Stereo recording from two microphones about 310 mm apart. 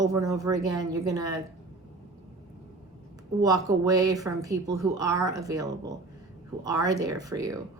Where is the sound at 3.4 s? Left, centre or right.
Centre.